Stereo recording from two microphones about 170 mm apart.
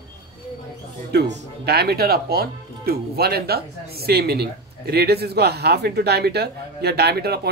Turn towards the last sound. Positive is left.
turn(degrees=-70)  # may be behind; listen again after turning